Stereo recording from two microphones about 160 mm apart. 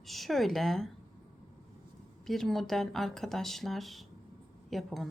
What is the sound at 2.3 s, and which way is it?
Speech, centre (ahead or behind).